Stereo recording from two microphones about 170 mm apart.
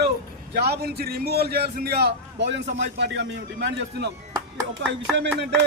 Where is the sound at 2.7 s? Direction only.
90° right.